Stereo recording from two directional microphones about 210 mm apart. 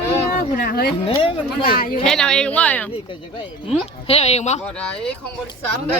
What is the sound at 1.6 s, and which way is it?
Speech, 45° left (ahead or behind).